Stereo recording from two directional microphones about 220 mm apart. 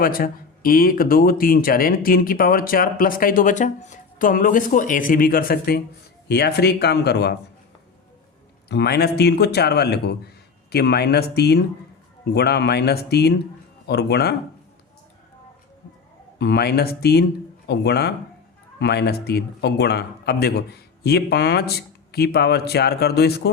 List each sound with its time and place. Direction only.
0.0 s a man's voice: 40° left (ahead or behind)
8.7 s a man's voice: 50° left (ahead or behind)
16.4 s a man's voice: 50° left (ahead or behind)